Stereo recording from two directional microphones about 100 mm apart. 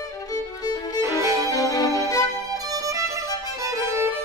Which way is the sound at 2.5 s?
35° right (ahead or behind).